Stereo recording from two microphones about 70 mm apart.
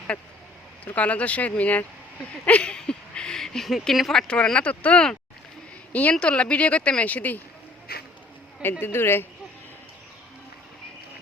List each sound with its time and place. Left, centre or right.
0.9 s speech: left
8.8 s a woman's voice: left